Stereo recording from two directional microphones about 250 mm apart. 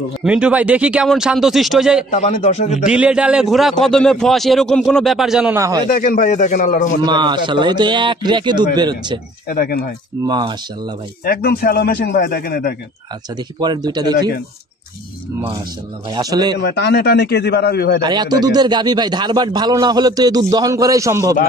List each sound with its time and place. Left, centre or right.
0.2 s a man's voice: centre
2.0 s speech: left
2.9 s a man's voice: centre
5.9 s a man's voice: left
7.1 s speech: centre
9.5 s a man's voice: left
10.2 s speech: centre
11.2 s a man's voice: left
13.6 s speech: centre
16.1 s speech: centre
16.6 s a man's voice: left
18.0 s speech: centre